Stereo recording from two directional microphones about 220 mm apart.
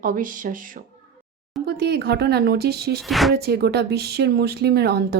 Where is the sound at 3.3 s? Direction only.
45° right (ahead or behind).